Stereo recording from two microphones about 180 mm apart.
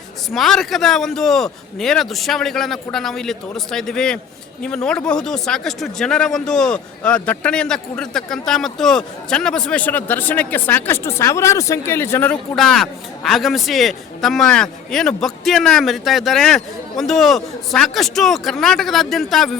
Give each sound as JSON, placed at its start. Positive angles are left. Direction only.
{"t": 0.3, "sound": "speech", "side_deg": 0}